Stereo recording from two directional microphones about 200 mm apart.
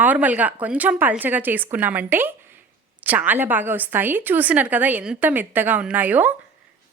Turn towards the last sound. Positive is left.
turn(degrees=-10)  # may be behind; listen again after turning